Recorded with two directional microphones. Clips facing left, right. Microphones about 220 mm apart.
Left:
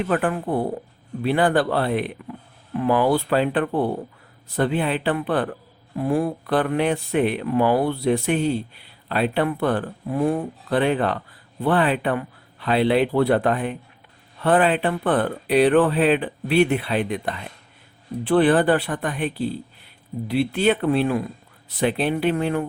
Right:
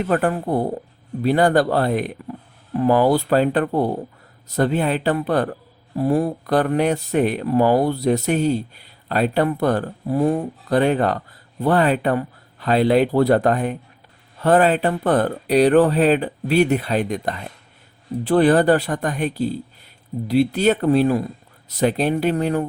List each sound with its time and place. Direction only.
0.0 s speech: 40° right (ahead or behind)